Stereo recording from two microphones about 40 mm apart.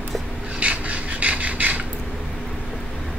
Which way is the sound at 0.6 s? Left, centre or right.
Right.